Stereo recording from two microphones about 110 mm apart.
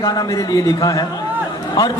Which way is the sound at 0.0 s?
35° left (ahead or behind).